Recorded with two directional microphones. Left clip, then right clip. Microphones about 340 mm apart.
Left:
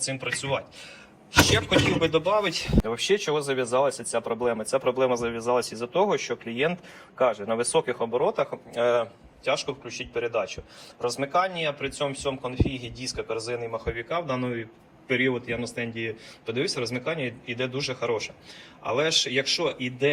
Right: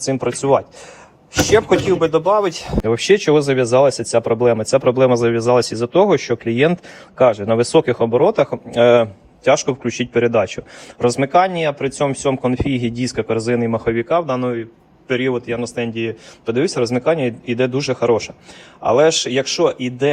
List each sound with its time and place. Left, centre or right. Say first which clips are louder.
0.0 s a man's voice: right 10 dB; centre
2.0 s a man's voice: right 8 dB; centre
2.8 s a man's voice: right 13 dB; right; by 20.1 s centre